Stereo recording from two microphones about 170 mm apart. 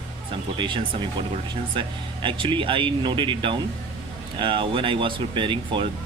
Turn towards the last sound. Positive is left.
turn(degrees=-30)  # may be behind; listen again after turning